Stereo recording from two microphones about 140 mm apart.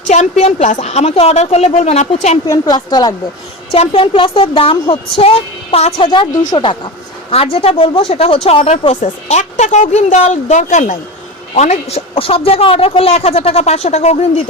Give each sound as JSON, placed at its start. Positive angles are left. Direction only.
{"t": 0.1, "sound": "a woman's voice", "side_deg": 55}
{"t": 2.5, "sound": "a woman's voice", "side_deg": 30}
{"t": 3.8, "sound": "a woman's voice", "side_deg": 40}
{"t": 6.1, "sound": "a woman's voice", "side_deg": 35}